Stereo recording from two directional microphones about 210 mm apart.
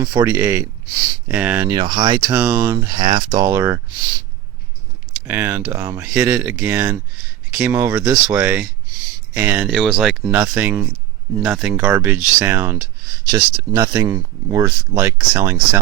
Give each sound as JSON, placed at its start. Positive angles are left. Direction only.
{"t": 0.0, "sound": "speech", "side_deg": -15}
{"t": 2.3, "sound": "speech", "side_deg": -5}
{"t": 2.7, "sound": "speech", "side_deg": -20}
{"t": 5.3, "sound": "speech", "side_deg": -10}